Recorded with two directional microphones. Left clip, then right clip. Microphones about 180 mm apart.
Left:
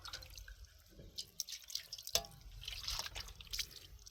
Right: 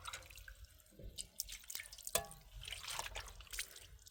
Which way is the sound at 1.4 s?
60° right (ahead or behind).